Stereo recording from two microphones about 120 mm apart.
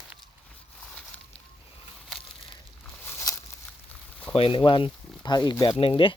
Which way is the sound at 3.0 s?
20° left (ahead or behind).